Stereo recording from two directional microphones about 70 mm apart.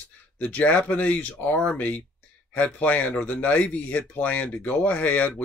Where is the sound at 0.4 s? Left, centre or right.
Centre.